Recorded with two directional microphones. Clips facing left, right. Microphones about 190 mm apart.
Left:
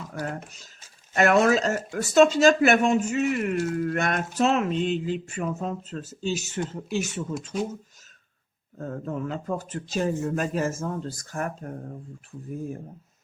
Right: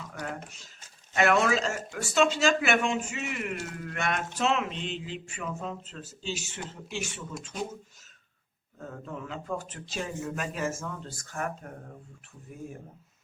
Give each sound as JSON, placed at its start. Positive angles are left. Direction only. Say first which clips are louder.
{"t": 0.1, "sound": "speech", "louder": "left 5 dB", "side_deg": 40}
{"t": 7.3, "sound": "speech", "louder": "left 5 dB", "side_deg": 0}
{"t": 8.8, "sound": "speech", "louder": "left 8 dB", "side_deg": 45}